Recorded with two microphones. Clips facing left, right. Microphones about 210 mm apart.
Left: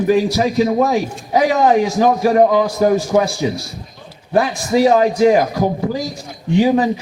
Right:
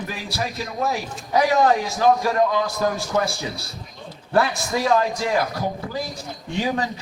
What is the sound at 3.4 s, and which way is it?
A man's voice, 15° left (ahead or behind).